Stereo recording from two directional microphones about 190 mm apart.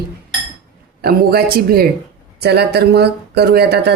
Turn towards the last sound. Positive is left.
turn(degrees=-55)  # may be behind; listen again after turning